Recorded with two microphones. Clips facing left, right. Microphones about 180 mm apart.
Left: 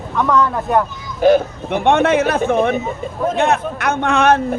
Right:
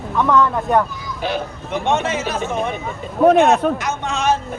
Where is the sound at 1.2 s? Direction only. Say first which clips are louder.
Left 12 dB; 45° left (ahead or behind).